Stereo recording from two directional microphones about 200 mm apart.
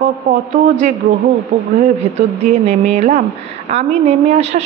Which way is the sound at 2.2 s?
35° right (ahead or behind).